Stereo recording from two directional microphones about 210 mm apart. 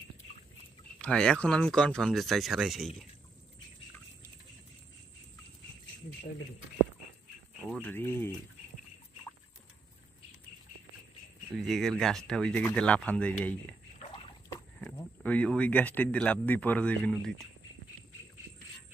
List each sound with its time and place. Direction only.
0.9 s speech: 5° left (ahead or behind)
7.6 s speech: 5° left (ahead or behind)
11.6 s speech: centre (ahead or behind)